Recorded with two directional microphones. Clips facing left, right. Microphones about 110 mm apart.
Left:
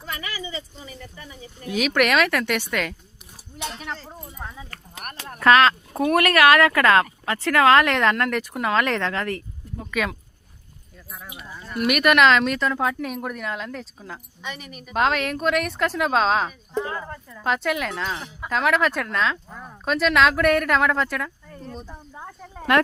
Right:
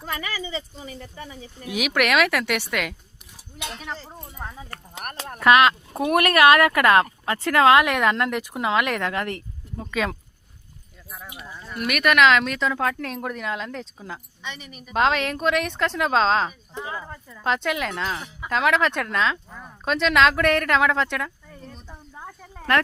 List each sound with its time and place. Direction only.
1.6 s speech: 10° right (ahead or behind)
4.9 s speech: 30° right (ahead or behind)
5.4 s speech: 15° right (ahead or behind)
11.5 s speech: centre (ahead or behind)
16.7 s speech: 10° right (ahead or behind)
21.8 s a sound: 5° left (ahead or behind)